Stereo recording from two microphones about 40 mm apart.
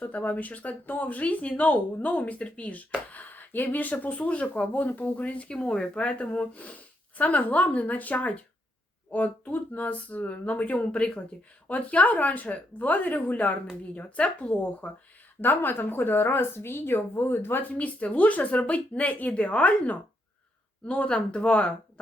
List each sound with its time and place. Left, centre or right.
0.0 s speech: left
5.6 s speech: left
15.4 s a woman's voice: left
17.7 s speech: left